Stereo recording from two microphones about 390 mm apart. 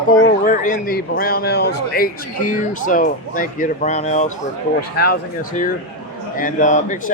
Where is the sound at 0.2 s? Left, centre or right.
Left.